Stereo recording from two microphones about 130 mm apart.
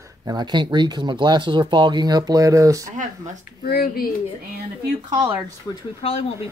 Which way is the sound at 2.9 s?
70° right (ahead or behind).